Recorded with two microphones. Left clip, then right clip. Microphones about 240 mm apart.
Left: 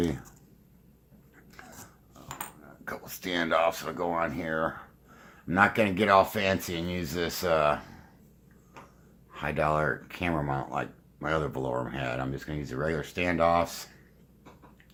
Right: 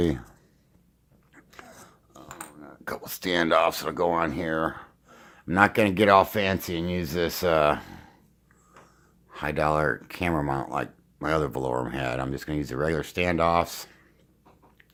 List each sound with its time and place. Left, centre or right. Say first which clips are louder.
1.5 s a sound: right 2 dB; right
2.6 s speech: right 8 dB; right
9.3 s speech: right 3 dB; right